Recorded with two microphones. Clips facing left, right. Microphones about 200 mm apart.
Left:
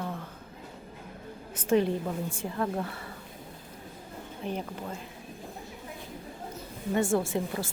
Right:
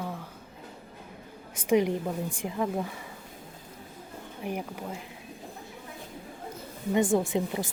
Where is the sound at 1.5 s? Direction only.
15° right (ahead or behind).